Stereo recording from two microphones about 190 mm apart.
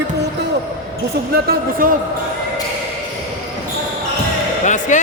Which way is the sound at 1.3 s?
50° right (ahead or behind).